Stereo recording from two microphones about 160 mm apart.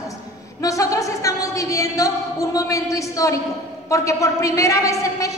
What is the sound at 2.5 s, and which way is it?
A woman's voice, 20° left (ahead or behind).